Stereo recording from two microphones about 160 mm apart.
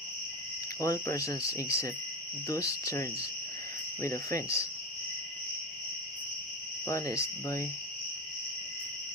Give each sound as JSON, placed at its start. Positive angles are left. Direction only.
{"t": 0.8, "sound": "speech", "side_deg": 20}
{"t": 6.8, "sound": "speech", "side_deg": 20}